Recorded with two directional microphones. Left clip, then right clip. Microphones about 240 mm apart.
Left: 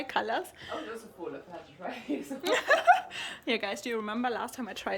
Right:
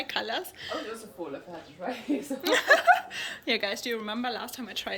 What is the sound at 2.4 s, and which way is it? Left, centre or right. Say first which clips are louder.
Speech: right 2 dB; centre.